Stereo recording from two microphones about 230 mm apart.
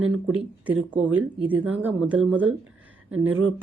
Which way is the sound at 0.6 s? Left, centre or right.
Centre.